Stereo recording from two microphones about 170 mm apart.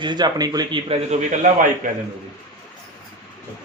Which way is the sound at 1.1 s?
45° right (ahead or behind).